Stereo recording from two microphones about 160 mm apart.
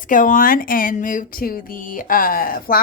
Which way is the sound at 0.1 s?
55° left (ahead or behind).